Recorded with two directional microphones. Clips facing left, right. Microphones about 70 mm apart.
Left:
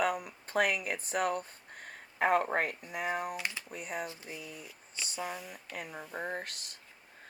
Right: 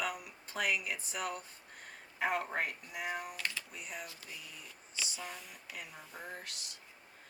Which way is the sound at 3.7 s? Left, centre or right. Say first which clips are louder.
Left 7 dB; left.